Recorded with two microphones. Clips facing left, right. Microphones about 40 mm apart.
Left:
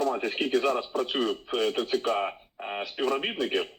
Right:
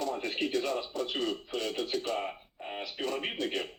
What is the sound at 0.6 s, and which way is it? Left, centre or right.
Speech, left.